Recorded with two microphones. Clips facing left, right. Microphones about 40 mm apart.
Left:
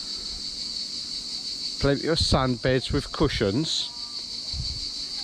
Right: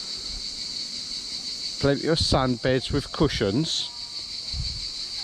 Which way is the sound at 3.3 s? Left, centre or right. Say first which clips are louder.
Even; right.